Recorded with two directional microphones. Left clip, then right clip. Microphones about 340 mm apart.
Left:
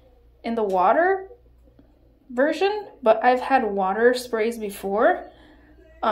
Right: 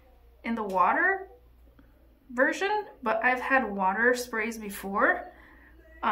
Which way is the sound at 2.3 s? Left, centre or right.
Centre.